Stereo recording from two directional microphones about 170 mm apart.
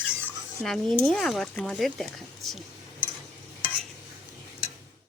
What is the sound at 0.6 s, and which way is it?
Speech, centre (ahead or behind).